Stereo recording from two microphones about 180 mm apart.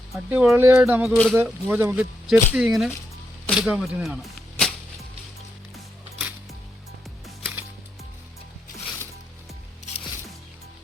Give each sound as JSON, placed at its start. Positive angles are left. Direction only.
{"t": 0.3, "sound": "speech", "side_deg": -10}
{"t": 1.1, "sound": "speech", "side_deg": 5}
{"t": 1.4, "sound": "speech", "side_deg": -10}
{"t": 6.1, "sound": "music", "side_deg": -5}